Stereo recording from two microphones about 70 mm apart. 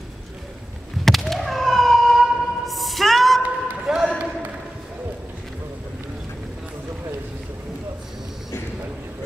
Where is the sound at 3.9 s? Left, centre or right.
Centre.